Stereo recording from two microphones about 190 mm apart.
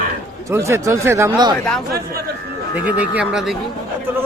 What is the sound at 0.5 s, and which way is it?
Speech, 15° right (ahead or behind).